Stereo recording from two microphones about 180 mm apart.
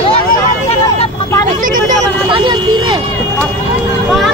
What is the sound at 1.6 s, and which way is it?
Vehicle, 50° right (ahead or behind).